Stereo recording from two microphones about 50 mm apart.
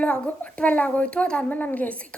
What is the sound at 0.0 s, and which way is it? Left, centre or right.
A woman's voice, left.